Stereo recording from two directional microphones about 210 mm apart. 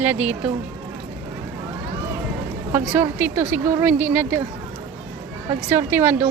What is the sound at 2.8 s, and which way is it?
Speech, 10° right (ahead or behind).